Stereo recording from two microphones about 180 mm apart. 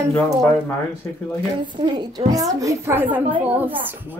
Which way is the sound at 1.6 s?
25° right (ahead or behind).